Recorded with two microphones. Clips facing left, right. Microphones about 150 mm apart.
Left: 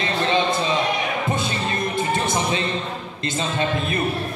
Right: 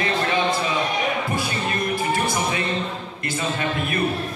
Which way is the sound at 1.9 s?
20° left (ahead or behind).